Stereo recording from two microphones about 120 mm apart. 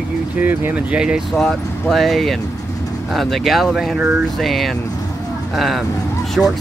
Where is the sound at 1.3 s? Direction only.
5° left (ahead or behind).